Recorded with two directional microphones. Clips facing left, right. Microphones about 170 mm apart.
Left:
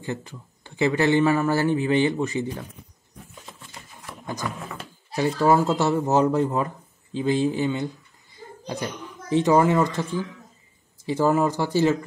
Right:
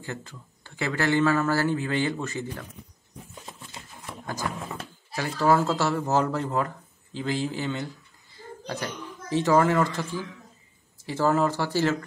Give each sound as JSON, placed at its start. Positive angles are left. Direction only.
{"t": 0.0, "sound": "a man's voice", "side_deg": 15}
{"t": 5.1, "sound": "speech", "side_deg": 20}
{"t": 9.3, "sound": "a man's voice", "side_deg": 20}